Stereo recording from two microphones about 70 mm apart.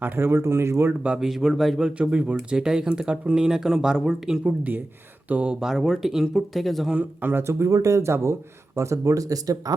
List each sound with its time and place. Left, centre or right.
0.0 s speech: right
1.0 s speech: centre
1.9 s speech: centre
4.4 s speech: right; by 6.9 s centre
6.9 s speech: right